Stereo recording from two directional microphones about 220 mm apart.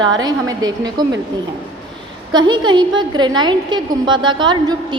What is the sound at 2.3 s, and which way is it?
A woman's voice, 20° right (ahead or behind).